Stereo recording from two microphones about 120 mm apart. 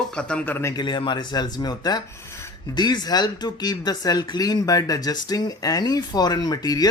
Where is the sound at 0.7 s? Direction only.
40° left (ahead or behind).